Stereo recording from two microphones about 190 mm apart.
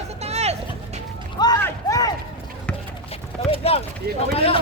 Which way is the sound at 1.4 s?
20° left (ahead or behind).